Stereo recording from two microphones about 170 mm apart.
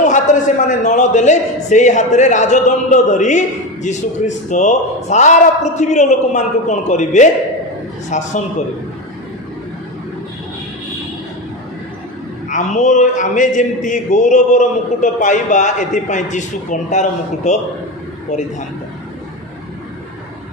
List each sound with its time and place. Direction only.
0.0 s a man's voice: 45° left (ahead or behind)
12.5 s a man's voice: 45° left (ahead or behind)